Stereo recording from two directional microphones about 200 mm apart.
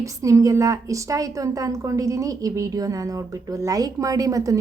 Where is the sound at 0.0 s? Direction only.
15° right (ahead or behind).